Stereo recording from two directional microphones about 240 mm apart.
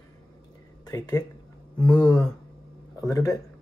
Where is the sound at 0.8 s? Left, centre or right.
Centre.